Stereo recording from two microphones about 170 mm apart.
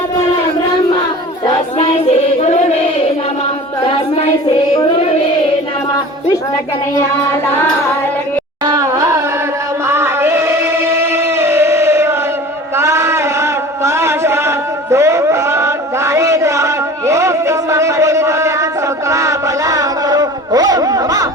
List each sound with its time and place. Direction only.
1.5 s child singing: 35° left (ahead or behind)
4.4 s child singing: 30° left (ahead or behind)
8.6 s carnatic music: 20° right (ahead or behind)
9.9 s a sound: 15° right (ahead or behind)
12.7 s chant: 15° right (ahead or behind)
19.1 s a sound: 20° right (ahead or behind)